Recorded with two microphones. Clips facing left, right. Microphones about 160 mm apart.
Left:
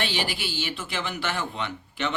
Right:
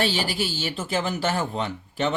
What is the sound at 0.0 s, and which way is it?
Speech, 40° right (ahead or behind).